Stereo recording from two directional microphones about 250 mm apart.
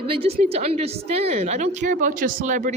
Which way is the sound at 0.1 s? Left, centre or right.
Right.